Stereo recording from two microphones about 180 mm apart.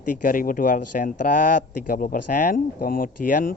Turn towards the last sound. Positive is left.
turn(degrees=50)  # may be behind; listen again after turning